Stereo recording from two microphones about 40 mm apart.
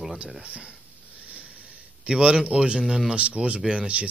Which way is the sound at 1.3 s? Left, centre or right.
Right.